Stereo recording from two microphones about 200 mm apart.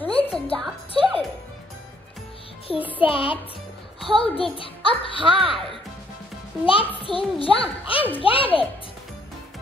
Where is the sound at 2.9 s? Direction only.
25° left (ahead or behind).